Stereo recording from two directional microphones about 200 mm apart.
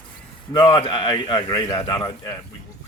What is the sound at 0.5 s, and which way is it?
Speech, 25° left (ahead or behind).